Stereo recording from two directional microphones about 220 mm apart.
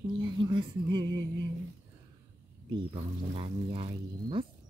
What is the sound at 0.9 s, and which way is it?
Music, 55° right (ahead or behind).